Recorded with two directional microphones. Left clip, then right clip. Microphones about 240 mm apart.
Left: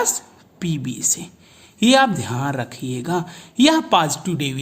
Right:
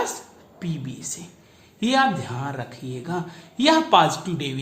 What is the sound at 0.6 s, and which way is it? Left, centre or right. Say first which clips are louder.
Speech: left 9 dB; left.